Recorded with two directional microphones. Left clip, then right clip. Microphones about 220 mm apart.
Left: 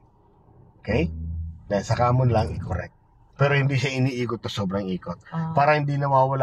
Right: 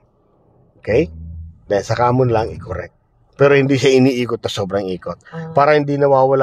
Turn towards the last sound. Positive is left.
turn(degrees=-50)  # may be behind; listen again after turning